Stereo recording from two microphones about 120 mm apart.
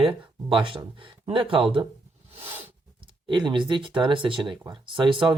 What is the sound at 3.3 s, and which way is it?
Speech, 40° right (ahead or behind).